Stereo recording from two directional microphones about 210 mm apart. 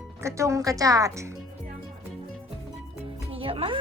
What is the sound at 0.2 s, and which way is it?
Speech, 15° right (ahead or behind).